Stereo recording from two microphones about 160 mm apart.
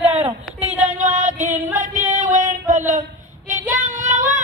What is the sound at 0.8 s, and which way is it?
Music, 45° right (ahead or behind).